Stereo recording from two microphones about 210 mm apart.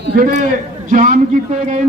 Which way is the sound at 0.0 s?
45° right (ahead or behind).